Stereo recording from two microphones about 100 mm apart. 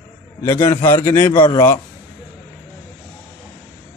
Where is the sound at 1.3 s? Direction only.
50° left (ahead or behind).